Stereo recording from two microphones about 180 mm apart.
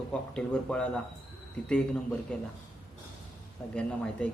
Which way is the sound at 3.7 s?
5° left (ahead or behind).